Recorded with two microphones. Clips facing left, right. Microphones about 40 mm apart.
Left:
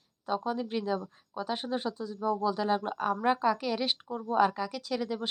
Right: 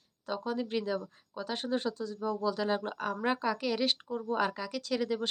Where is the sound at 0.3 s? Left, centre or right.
Centre.